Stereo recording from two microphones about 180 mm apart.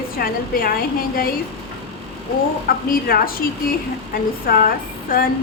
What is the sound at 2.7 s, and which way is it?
Speech, 55° left (ahead or behind).